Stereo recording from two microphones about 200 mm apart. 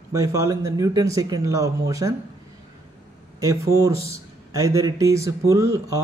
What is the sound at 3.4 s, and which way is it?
A man's voice, 15° right (ahead or behind).